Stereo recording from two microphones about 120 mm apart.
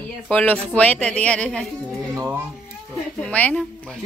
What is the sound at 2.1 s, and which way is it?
Speech, 25° right (ahead or behind).